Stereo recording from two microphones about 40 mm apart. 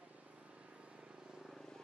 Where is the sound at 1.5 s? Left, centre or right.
Centre.